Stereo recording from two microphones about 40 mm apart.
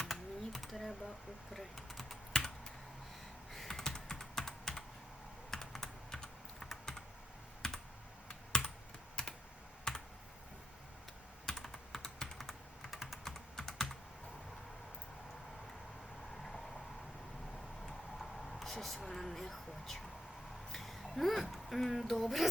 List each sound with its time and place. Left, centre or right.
0.1 s computer keyboard: centre
1.5 s typing: centre
2.3 s computer keyboard: centre
3.5 s computer keyboard: centre
6.1 s typing: centre
7.6 s computer keyboard: centre
9.9 s computer keyboard: centre
11.5 s computer keyboard: centre
13.2 s typing: centre
18.2 s a sound: centre
19.0 s speech: centre